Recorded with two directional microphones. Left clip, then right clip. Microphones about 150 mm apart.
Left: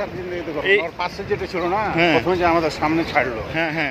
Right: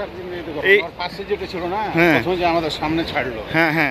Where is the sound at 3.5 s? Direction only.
60° right (ahead or behind).